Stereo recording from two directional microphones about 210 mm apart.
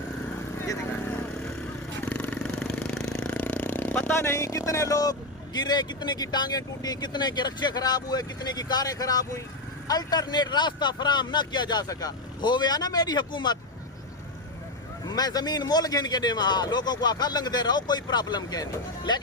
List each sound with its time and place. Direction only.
2.0 s vehicle: 5° left (ahead or behind)
5.5 s a man's voice: 20° left (ahead or behind)
15.0 s a man's voice: 20° left (ahead or behind)